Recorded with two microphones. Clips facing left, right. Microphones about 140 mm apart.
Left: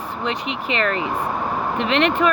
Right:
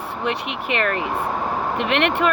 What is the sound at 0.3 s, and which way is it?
Speech, 65° right (ahead or behind).